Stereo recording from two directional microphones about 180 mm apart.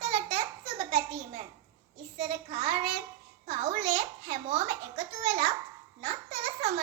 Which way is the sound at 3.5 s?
45° right (ahead or behind).